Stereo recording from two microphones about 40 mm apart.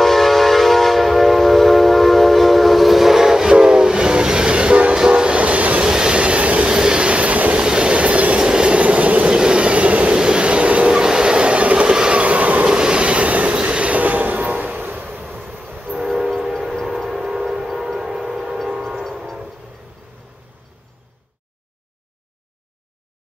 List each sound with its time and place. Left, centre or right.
0.0 s train: centre; by 5.9 s right
5.9 s train: centre
6.7 s train: centre; by 7.5 s right
7.5 s train: right
8.4 s train: centre
9.3 s train: right
10.1 s vehicle: right
10.9 s train: centre
12.2 s train: right
12.6 s vehicle: right
13.6 s train: right
15.1 s vehicle: right
15.6 s train: right
16.3 s train: centre